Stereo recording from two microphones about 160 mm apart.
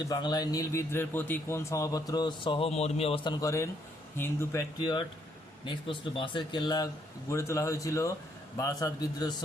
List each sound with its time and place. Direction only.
0.0 s a man's voice: 25° left (ahead or behind)
3.4 s a man's voice: 20° left (ahead or behind)
5.6 s a man's voice: 30° left (ahead or behind)